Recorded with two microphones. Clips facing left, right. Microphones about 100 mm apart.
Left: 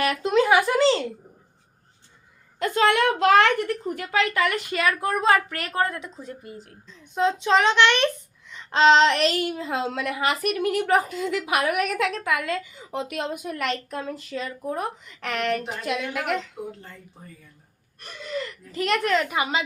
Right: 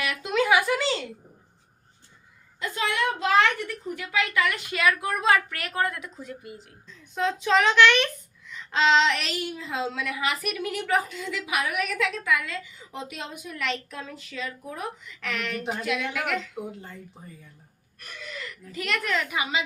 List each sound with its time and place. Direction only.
0.0 s speech: 40° left (ahead or behind)
2.6 s a woman's voice: 65° left (ahead or behind)
4.0 s a woman's voice: 40° left (ahead or behind)
7.0 s speech: 20° left (ahead or behind)
8.7 s a woman's voice: 35° left (ahead or behind)
9.3 s a woman's voice: 60° left (ahead or behind); by 16.4 s 35° left (ahead or behind)
18.7 s a woman's voice: 35° left (ahead or behind)